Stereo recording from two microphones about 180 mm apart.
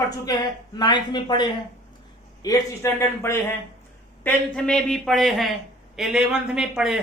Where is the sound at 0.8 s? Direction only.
25° left (ahead or behind).